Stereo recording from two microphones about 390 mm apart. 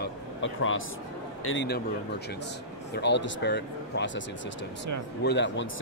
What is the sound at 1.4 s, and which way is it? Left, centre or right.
Speech, left.